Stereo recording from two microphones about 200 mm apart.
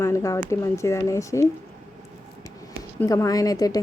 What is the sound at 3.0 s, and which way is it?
Speech, 15° left (ahead or behind).